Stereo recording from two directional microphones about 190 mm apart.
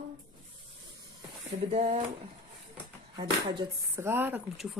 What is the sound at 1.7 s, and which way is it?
Speech, 35° right (ahead or behind).